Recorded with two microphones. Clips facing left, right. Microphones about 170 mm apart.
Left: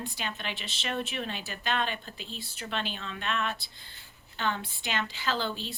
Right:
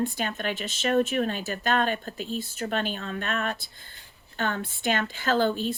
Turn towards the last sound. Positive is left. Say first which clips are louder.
# right 8 dB
turn(degrees=-50)  # may be behind; listen again after turning